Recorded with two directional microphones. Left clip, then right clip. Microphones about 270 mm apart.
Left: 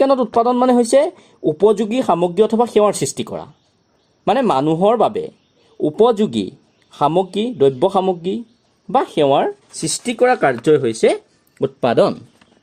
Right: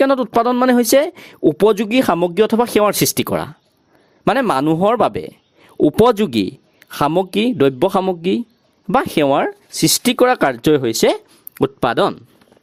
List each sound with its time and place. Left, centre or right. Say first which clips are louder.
0.0 s speech: even; right